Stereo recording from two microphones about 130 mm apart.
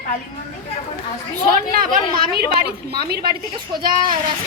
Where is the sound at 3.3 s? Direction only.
35° right (ahead or behind).